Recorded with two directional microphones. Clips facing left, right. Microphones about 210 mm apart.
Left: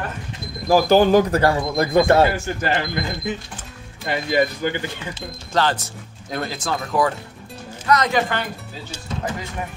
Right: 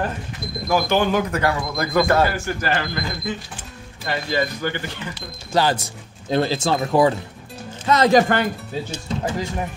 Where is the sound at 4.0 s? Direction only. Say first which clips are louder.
Left 3 dB; 20° left (ahead or behind).